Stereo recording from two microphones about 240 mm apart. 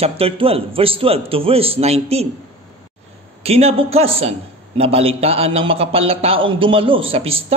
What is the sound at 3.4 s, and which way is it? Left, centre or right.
A man's voice, right.